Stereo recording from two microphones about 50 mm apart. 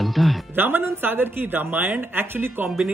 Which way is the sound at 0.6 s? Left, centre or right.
Right.